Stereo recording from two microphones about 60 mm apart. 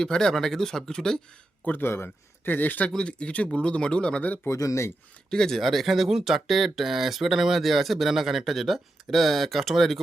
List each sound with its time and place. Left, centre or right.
0.0 s speech: centre
1.6 s speech: left
2.9 s speech: centre
4.4 s speech: left
5.3 s speech: centre